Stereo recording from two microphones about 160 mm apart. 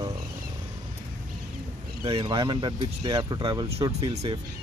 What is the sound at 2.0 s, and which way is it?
Speech, 35° right (ahead or behind).